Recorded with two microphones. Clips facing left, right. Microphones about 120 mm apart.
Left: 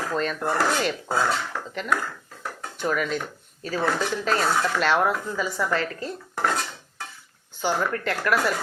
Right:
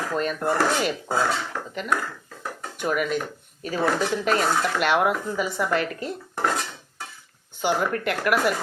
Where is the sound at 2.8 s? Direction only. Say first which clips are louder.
Right 1 dB; 10° right (ahead or behind).